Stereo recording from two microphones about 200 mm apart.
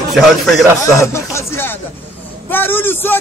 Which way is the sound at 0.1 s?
Centre (ahead or behind).